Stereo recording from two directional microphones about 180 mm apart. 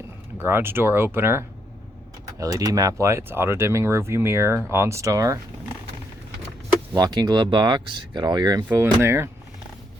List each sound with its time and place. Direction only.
0.3 s speech: 15° right (ahead or behind)
6.9 s speech: 20° right (ahead or behind)